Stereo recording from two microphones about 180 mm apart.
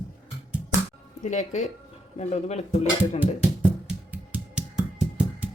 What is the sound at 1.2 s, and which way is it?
Speech, 40° left (ahead or behind).